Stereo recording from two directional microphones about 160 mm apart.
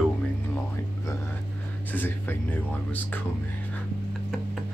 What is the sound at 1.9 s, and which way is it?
Speech, 10° left (ahead or behind).